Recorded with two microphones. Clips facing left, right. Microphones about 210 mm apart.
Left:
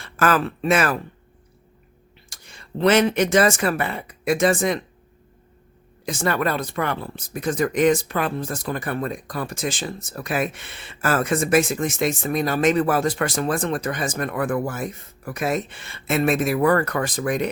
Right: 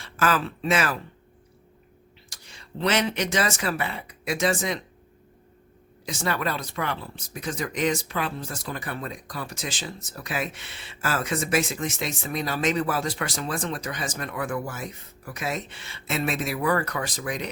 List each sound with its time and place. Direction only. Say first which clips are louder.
0.0 s speech: left 4 dB; 55° left (ahead or behind)
2.3 s speech: left 6 dB; 50° left (ahead or behind)
6.1 s speech: left 5 dB; 55° left (ahead or behind)